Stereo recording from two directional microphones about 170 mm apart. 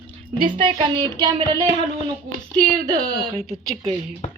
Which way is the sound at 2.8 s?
20° right (ahead or behind).